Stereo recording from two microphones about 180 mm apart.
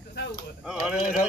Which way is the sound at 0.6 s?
5° right (ahead or behind).